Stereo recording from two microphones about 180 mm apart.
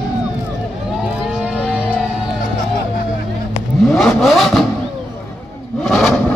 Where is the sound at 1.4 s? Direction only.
5° right (ahead or behind).